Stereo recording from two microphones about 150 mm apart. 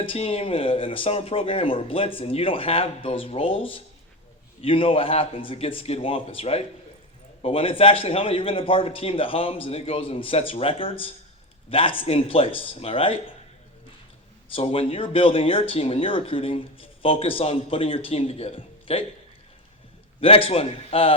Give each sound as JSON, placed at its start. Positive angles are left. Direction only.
{"t": 0.0, "sound": "speech", "side_deg": 40}
{"t": 14.5, "sound": "speech", "side_deg": 40}
{"t": 20.2, "sound": "speech", "side_deg": 40}